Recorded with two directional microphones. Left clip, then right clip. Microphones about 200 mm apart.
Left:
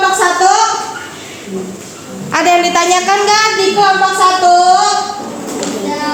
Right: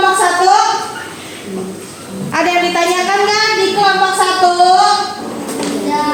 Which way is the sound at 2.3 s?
45° left (ahead or behind).